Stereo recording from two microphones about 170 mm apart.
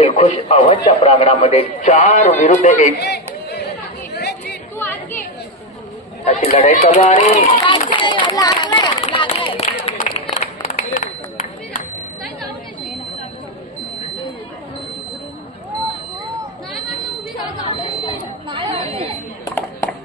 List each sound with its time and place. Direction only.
0.0 s a man's voice: 40° left (ahead or behind)
3.0 s chatter: 75° left (ahead or behind)
4.7 s chatter: 10° left (ahead or behind)
6.2 s speech: 40° left (ahead or behind)
7.9 s run: 30° left (ahead or behind)
9.8 s a sound: 35° left (ahead or behind)
17.4 s chatter: 30° left (ahead or behind)
18.5 s chatter: 30° right (ahead or behind)
19.5 s a sound: 15° left (ahead or behind)